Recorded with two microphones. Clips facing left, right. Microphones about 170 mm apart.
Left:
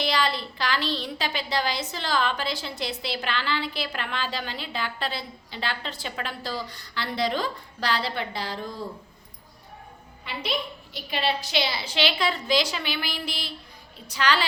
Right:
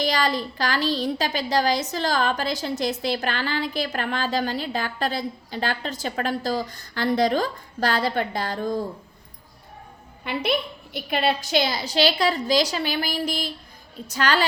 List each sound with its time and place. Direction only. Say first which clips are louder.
0.0 s a woman's voice: right 3 dB; 45° right (ahead or behind)
10.2 s a woman's voice: right 6 dB; 55° right (ahead or behind)